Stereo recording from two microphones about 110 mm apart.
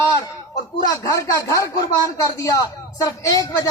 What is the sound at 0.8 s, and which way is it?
Speech, 30° left (ahead or behind).